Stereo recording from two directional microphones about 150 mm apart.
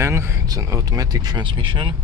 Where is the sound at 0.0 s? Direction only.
15° right (ahead or behind).